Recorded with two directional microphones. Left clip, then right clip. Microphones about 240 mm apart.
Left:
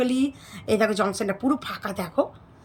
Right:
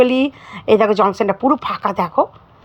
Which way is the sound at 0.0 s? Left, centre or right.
Centre.